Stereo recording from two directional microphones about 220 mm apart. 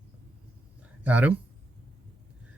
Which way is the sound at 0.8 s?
5° right (ahead or behind).